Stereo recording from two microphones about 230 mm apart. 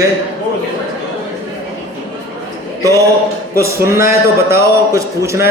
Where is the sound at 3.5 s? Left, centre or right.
Centre.